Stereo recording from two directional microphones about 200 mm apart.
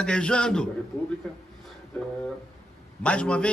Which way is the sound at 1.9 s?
5° left (ahead or behind).